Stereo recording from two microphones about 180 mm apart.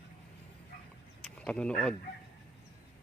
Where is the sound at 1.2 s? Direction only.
5° left (ahead or behind).